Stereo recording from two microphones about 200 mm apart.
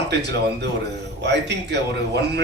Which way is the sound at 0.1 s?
60° right (ahead or behind).